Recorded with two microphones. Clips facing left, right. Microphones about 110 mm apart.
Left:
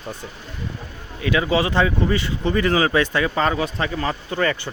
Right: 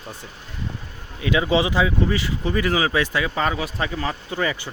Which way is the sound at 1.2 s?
20° right (ahead or behind).